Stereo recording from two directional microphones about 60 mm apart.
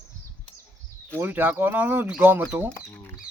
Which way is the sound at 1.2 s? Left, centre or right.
Right.